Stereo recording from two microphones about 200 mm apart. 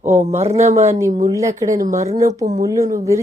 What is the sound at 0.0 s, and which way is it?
Speech, 35° right (ahead or behind).